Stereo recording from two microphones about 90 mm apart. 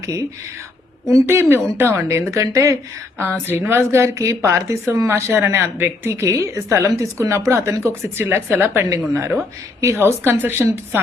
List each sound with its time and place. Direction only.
0.0 s a woman's voice: 35° right (ahead or behind)
3.4 s a woman's voice: 25° right (ahead or behind)